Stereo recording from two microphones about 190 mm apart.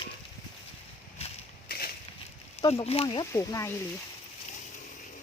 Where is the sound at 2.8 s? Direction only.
30° left (ahead or behind).